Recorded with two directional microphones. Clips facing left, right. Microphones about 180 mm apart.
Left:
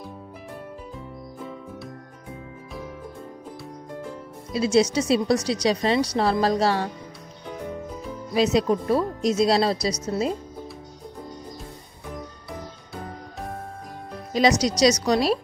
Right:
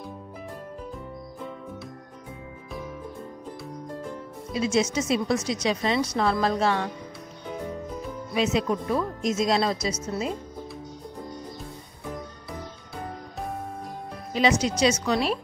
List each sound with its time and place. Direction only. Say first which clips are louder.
4.6 s a woman's voice: left 4 dB; 35° left (ahead or behind)
8.4 s a woman's voice: left 4 dB; 35° left (ahead or behind)
14.3 s a woman's voice: left 3 dB; 40° left (ahead or behind)